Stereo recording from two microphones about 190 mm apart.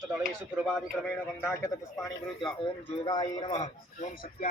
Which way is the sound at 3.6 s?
40° left (ahead or behind).